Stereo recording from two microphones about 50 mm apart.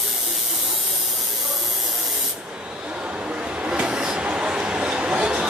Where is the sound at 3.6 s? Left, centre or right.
Centre.